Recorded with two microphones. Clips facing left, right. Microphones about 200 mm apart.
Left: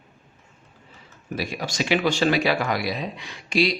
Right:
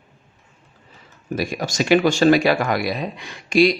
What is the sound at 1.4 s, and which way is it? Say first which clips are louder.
Speech: right 4 dB; 45° right (ahead or behind).